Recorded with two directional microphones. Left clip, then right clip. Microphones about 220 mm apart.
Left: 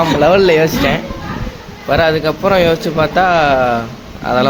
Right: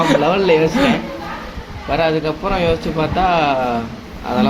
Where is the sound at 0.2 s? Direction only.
50° left (ahead or behind).